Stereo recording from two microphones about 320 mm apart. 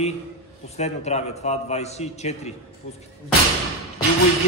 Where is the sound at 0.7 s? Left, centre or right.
Left.